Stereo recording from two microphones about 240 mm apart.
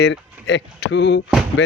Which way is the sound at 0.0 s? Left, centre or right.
Left.